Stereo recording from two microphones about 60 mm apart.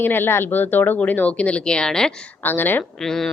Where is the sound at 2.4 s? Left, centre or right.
Left.